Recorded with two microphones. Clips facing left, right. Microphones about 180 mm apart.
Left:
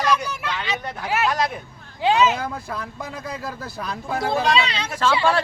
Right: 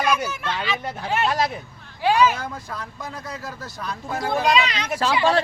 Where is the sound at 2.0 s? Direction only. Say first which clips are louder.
Even; 25° left (ahead or behind).